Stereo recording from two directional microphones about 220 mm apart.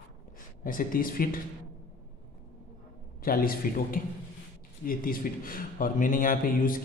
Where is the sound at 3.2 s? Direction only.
40° left (ahead or behind).